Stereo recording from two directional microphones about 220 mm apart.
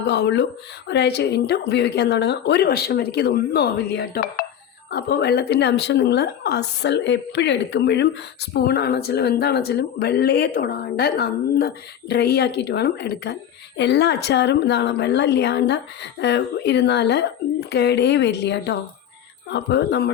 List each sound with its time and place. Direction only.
0.0 s a woman's voice: 50° left (ahead or behind)